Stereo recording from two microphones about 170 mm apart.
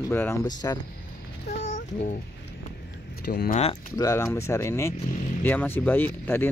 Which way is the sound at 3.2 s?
65° left (ahead or behind).